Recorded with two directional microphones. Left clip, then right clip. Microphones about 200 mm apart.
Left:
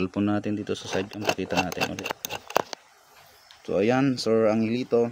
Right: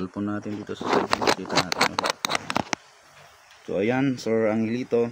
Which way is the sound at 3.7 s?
20° left (ahead or behind).